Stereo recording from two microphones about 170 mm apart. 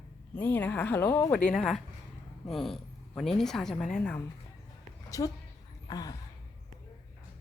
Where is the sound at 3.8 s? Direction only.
50° left (ahead or behind).